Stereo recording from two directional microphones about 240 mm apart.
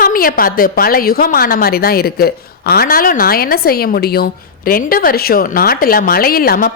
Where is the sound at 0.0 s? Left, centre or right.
Left.